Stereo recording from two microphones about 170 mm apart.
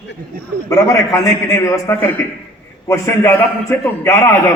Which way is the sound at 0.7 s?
20° left (ahead or behind).